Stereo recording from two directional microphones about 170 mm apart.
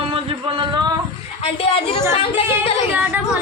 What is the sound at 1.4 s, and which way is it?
Speech, 35° left (ahead or behind).